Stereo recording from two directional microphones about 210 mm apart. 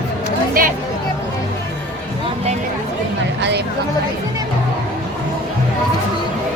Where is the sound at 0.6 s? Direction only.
45° right (ahead or behind).